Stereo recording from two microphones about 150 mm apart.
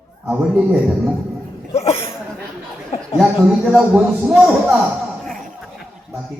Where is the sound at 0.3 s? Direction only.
5° right (ahead or behind).